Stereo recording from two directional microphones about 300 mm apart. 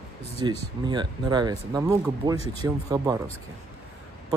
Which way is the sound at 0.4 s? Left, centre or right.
Centre.